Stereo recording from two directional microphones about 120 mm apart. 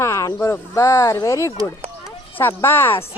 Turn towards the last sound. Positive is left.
turn(degrees=20)  # may be behind; listen again after turning